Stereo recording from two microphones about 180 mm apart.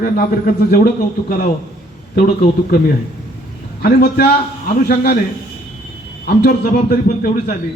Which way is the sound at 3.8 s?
60° left (ahead or behind).